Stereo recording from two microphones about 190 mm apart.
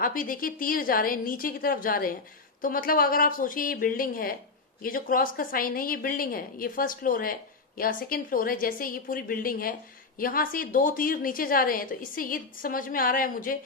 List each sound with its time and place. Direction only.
0.0 s a woman's voice: 45° left (ahead or behind)